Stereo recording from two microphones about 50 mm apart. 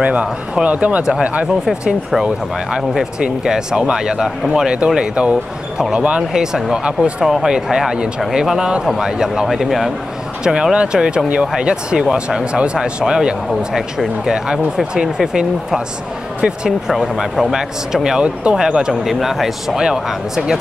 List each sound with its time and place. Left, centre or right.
0.0 s speech: right
1.0 s speech: centre
1.7 s a man's voice: centre
3.2 s speech: centre
6.3 s a man's voice: centre
10.4 s speech: centre
16.9 s speech: centre
18.2 s speech: right
19.0 s a man's voice: centre